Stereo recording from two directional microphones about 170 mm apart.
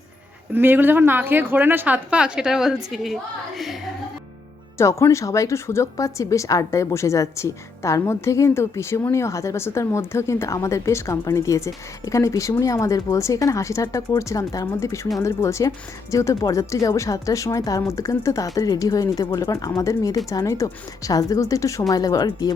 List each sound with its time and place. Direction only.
0.5 s a woman's voice: 10° right (ahead or behind)
4.8 s a woman's voice: 15° left (ahead or behind)